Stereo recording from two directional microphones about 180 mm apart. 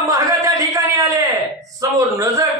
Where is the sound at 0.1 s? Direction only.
20° right (ahead or behind).